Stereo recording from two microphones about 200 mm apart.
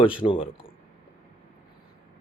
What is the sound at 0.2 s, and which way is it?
Speech, 25° left (ahead or behind).